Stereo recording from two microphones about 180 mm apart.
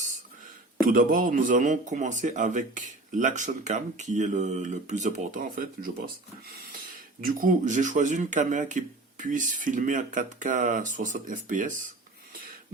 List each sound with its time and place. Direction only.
0.9 s speech: 50° right (ahead or behind)
7.2 s speech: 50° right (ahead or behind)